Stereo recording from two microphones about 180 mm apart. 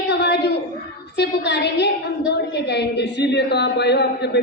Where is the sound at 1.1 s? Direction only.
70° left (ahead or behind).